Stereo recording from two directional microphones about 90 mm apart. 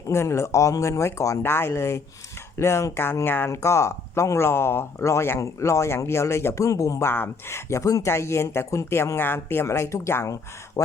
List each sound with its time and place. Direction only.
0.1 s speech: 30° left (ahead or behind)
7.1 s speech: 25° left (ahead or behind)
10.8 s speech: 40° left (ahead or behind)